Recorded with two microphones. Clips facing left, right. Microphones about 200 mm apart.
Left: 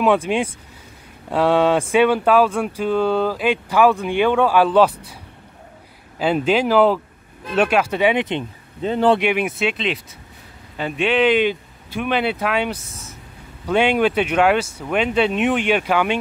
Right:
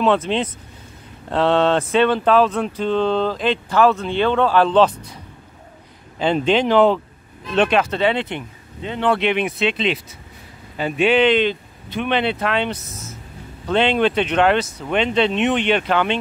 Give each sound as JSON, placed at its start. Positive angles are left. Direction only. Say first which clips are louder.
{"t": 0.0, "sound": "speech", "louder": "left 1 dB", "side_deg": 10}
{"t": 6.1, "sound": "speech", "louder": "even", "side_deg": 5}
{"t": 8.8, "sound": "speech", "louder": "left 4 dB", "side_deg": 40}
{"t": 9.2, "sound": "speech", "louder": "even", "side_deg": 5}
{"t": 11.2, "sound": "speech", "louder": "even", "side_deg": 10}
{"t": 12.7, "sound": "speech", "louder": "right 3 dB", "side_deg": 30}
{"t": 13.7, "sound": "speech", "louder": "even", "side_deg": 10}